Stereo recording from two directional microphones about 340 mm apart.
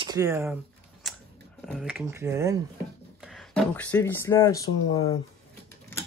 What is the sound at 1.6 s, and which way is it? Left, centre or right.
Speech, centre.